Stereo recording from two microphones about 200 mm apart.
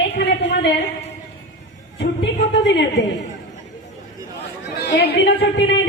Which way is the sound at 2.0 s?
60° left (ahead or behind).